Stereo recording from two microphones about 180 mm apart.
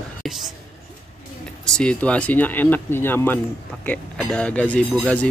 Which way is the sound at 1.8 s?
5° left (ahead or behind).